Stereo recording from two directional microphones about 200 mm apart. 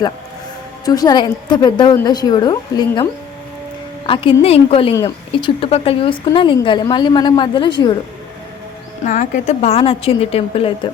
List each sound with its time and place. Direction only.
0.9 s a woman's voice: 20° left (ahead or behind)
9.0 s a woman's voice: 40° left (ahead or behind)